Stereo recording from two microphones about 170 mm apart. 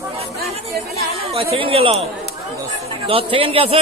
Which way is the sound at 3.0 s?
35° right (ahead or behind).